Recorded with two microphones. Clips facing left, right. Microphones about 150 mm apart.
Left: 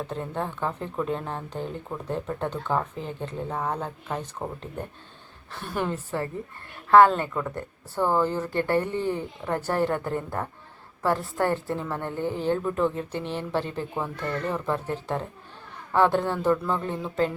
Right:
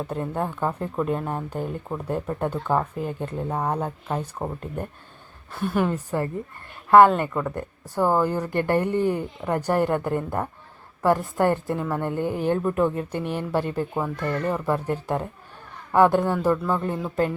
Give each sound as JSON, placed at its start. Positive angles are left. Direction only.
{"t": 0.0, "sound": "speech", "side_deg": -10}
{"t": 5.5, "sound": "speech", "side_deg": -10}